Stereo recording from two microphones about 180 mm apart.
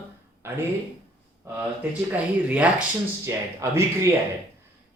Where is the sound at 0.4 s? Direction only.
15° right (ahead or behind).